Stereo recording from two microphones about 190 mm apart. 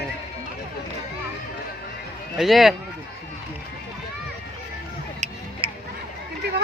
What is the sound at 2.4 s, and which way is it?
Speech, centre (ahead or behind).